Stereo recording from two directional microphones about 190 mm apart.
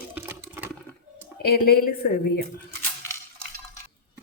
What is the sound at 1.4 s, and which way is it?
Speech, 55° left (ahead or behind).